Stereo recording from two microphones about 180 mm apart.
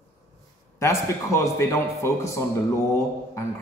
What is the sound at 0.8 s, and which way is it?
A man's voice, 15° left (ahead or behind).